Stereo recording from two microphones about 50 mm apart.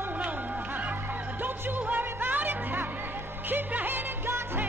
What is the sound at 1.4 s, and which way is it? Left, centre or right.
Music, right.